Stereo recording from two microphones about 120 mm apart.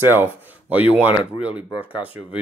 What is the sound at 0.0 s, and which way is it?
Speech, 20° right (ahead or behind).